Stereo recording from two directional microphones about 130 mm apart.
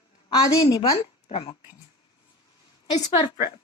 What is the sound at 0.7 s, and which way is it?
Speech, 40° left (ahead or behind).